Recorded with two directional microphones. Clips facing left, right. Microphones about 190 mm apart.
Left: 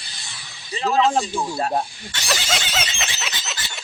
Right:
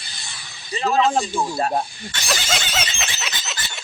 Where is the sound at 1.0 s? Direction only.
Centre (ahead or behind).